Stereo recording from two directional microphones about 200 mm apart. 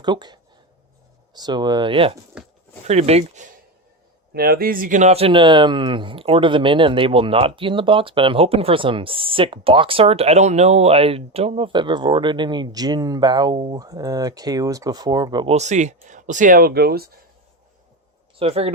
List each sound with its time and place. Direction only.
0.0 s speech: 20° right (ahead or behind)
4.4 s speech: 50° right (ahead or behind); by 15.5 s 20° right (ahead or behind)
15.5 s speech: 35° right (ahead or behind); by 17.1 s 50° right (ahead or behind)
18.3 s speech: 30° right (ahead or behind)